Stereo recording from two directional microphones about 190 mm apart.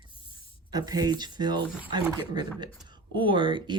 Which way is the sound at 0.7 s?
20° right (ahead or behind).